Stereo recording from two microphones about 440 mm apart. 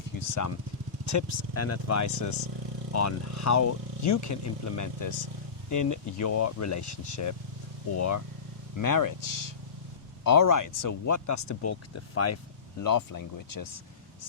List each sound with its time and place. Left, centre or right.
1.0 s speech: left
12.8 s speech: left